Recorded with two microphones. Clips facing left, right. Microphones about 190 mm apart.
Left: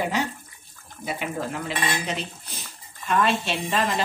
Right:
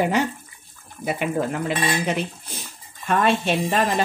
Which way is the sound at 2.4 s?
50° right (ahead or behind).